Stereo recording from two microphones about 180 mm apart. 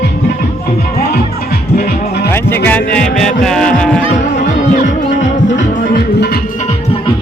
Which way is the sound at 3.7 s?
5° left (ahead or behind).